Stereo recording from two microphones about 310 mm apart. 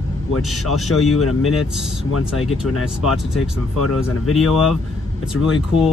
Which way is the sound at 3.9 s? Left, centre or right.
Centre.